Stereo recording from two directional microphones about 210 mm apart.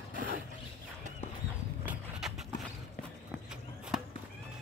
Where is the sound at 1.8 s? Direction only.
5° right (ahead or behind).